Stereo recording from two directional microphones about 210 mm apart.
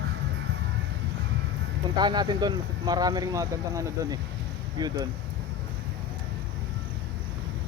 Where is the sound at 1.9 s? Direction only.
20° right (ahead or behind).